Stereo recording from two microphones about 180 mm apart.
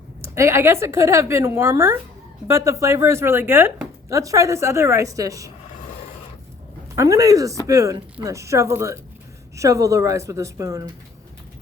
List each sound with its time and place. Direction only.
0.2 s speech: 15° right (ahead or behind)
6.9 s speech: 20° right (ahead or behind)